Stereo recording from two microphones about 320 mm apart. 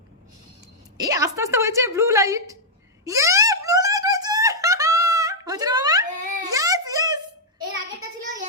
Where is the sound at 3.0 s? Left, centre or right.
Centre.